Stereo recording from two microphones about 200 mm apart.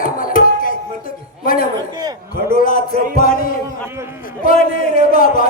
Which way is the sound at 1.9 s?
20° right (ahead or behind).